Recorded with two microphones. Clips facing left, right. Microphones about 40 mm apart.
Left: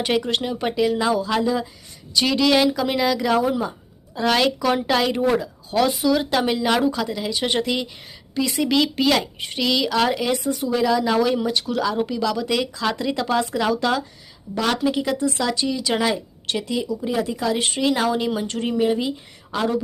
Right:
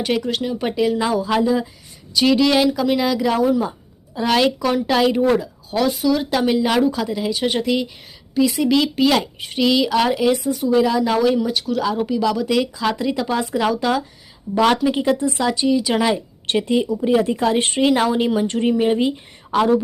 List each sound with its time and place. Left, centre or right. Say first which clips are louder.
0.0 s speech: right 1 dB; centre
12.0 s speech: right 4 dB; centre
14.9 s a woman's voice: right 3 dB; right
15.3 s speech: right 5 dB; centre
16.1 s a woman's voice: right 5 dB; right
17.2 s a woman's voice: right 4 dB; right